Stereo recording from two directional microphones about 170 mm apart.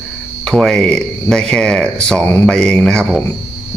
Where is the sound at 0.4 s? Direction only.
Centre (ahead or behind).